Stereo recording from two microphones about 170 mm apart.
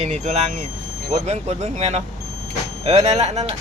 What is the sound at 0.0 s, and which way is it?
Speech, 40° right (ahead or behind).